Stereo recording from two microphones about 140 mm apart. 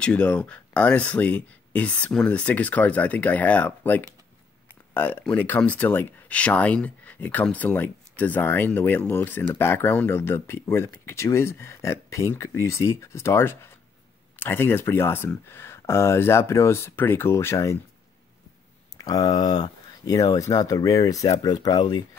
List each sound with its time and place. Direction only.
0.0 s speech: 10° left (ahead or behind)
18.9 s speech: 25° left (ahead or behind)